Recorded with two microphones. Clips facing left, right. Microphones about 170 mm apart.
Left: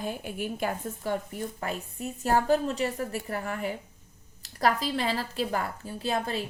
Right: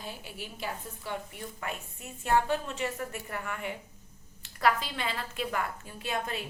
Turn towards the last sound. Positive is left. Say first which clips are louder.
# left 5 dB
turn(degrees=35)  # may be behind; listen again after turning